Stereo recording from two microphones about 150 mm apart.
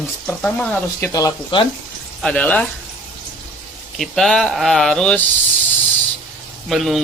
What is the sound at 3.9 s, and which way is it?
Speech, centre (ahead or behind).